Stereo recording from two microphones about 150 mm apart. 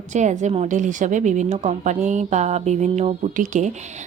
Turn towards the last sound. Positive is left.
turn(degrees=-55)  # may be behind; listen again after turning